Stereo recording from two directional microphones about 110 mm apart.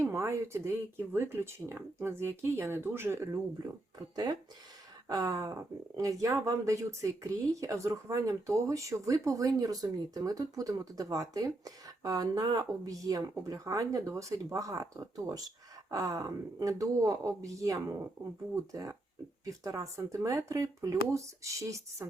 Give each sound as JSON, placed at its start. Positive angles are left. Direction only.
{"t": 0.0, "sound": "speech", "side_deg": -25}
{"t": 4.1, "sound": "speech", "side_deg": -35}